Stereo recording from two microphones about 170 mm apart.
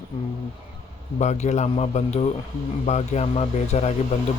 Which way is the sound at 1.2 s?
45° left (ahead or behind).